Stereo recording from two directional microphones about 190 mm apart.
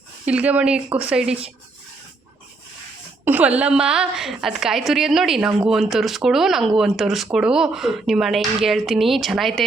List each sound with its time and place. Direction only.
0.3 s a woman's voice: 5° right (ahead or behind)
3.2 s a sound: 10° right (ahead or behind)
3.6 s a woman's voice: 5° right (ahead or behind)